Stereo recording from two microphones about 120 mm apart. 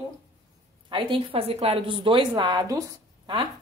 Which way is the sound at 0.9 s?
45° right (ahead or behind).